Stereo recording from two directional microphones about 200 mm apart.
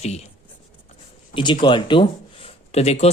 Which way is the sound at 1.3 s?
25° left (ahead or behind).